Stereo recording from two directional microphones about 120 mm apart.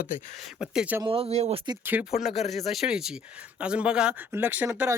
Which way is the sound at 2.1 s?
Centre (ahead or behind).